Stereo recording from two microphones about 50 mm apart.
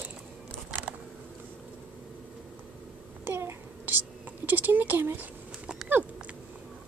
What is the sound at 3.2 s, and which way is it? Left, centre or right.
Babbling, right.